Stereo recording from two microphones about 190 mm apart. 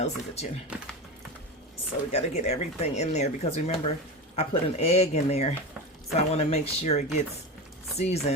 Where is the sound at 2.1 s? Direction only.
35° left (ahead or behind).